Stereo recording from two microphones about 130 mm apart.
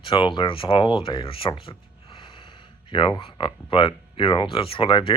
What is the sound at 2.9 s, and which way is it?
Speech, 35° left (ahead or behind).